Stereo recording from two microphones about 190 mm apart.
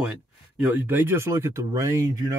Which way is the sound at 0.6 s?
10° right (ahead or behind).